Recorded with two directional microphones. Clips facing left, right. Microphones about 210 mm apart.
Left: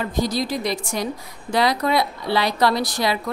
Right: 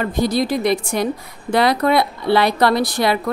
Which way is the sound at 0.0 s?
60° right (ahead or behind).